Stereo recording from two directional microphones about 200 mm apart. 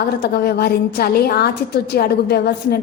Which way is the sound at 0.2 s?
50° left (ahead or behind).